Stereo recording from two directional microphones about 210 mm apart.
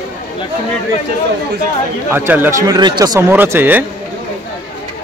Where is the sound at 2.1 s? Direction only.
10° right (ahead or behind).